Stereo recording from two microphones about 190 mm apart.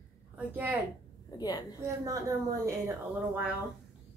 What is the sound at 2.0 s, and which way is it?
Speech, 15° right (ahead or behind).